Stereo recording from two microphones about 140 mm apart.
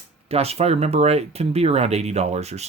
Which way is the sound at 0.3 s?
45° right (ahead or behind).